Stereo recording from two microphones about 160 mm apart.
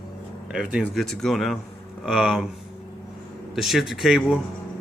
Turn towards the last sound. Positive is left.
turn(degrees=-5)  # may be behind; listen again after turning